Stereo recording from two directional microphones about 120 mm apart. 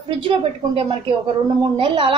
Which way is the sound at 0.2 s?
50° right (ahead or behind).